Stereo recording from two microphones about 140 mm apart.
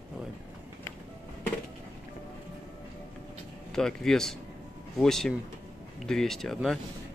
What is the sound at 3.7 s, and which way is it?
Speech, 5° left (ahead or behind).